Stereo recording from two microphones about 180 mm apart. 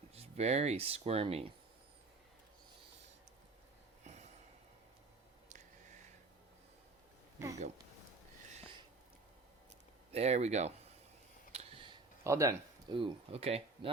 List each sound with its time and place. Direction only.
0.1 s speech: 35° right (ahead or behind)
4.0 s a sound: 40° right (ahead or behind)
10.1 s speech: 35° right (ahead or behind)
11.5 s a sound: 30° right (ahead or behind)
12.2 s speech: 15° right (ahead or behind)
12.9 s speech: 30° right (ahead or behind)